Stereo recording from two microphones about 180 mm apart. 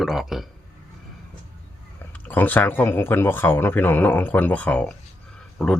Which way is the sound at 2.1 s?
10° left (ahead or behind).